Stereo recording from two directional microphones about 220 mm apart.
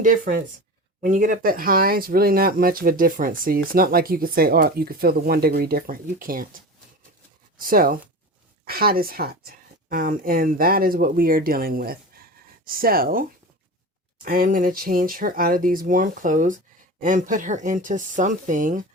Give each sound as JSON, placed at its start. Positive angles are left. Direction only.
{"t": 0.0, "sound": "speech", "side_deg": -35}
{"t": 7.6, "sound": "speech", "side_deg": -40}